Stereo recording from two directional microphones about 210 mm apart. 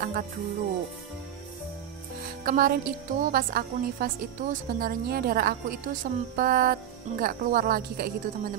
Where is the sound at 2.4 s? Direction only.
45° right (ahead or behind).